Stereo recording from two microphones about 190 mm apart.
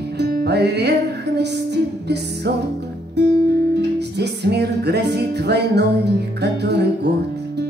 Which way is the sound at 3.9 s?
60° right (ahead or behind).